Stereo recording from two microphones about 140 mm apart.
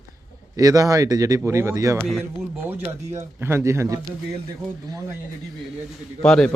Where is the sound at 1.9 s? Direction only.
Centre (ahead or behind).